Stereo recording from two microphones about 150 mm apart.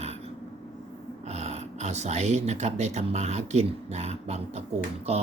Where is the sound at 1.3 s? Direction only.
45° right (ahead or behind).